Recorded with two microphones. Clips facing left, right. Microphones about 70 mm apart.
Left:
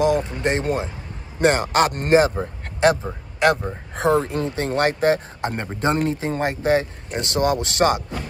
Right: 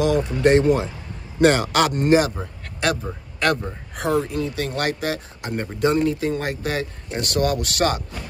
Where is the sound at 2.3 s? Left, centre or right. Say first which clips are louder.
Left 5 dB; left.